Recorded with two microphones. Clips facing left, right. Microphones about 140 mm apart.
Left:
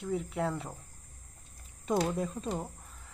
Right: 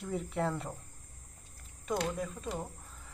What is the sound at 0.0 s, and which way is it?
Speech, centre (ahead or behind).